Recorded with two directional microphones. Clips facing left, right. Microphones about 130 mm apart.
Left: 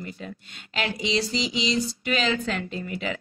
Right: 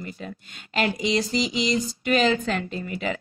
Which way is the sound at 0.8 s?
45° right (ahead or behind).